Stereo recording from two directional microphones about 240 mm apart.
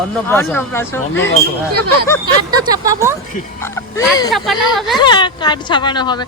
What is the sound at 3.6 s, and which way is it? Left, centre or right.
Speech, centre.